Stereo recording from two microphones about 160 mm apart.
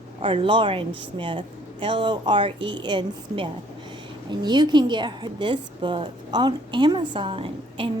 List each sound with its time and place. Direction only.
0.2 s a woman's voice: 30° right (ahead or behind)